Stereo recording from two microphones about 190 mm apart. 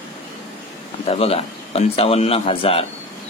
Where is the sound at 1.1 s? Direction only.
30° left (ahead or behind).